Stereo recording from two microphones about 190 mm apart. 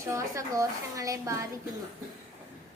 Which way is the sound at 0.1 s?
15° right (ahead or behind).